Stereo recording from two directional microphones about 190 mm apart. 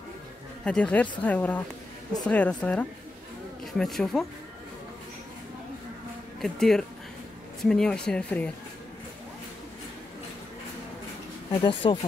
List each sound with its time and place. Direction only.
0.7 s speech: 5° left (ahead or behind)
6.4 s speech: centre (ahead or behind)
11.6 s speech: 25° left (ahead or behind)